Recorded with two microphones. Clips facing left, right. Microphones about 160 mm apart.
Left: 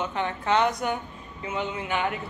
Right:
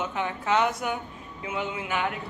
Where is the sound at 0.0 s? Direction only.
5° right (ahead or behind).